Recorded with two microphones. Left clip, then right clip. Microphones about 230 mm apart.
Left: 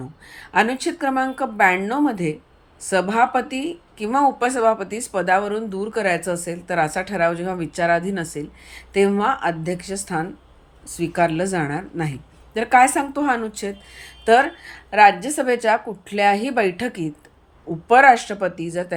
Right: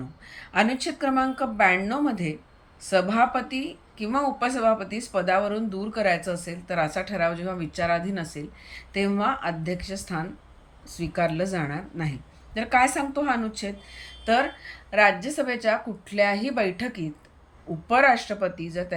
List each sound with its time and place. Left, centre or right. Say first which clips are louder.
0.3 s speech: left 5 dB; centre